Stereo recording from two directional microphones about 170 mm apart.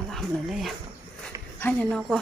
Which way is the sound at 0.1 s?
Centre (ahead or behind).